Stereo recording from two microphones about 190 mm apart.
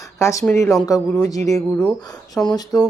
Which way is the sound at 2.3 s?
20° left (ahead or behind).